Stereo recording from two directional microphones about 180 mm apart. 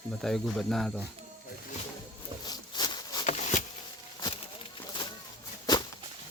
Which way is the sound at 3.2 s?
40° left (ahead or behind).